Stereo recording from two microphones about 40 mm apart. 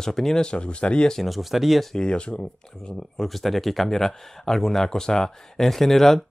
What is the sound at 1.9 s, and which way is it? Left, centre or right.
Speech, left.